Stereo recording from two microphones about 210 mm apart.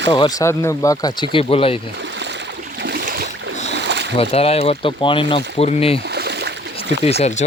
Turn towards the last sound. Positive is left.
turn(degrees=30)  # may be behind; listen again after turning